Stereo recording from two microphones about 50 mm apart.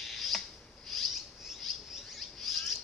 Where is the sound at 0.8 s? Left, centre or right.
Centre.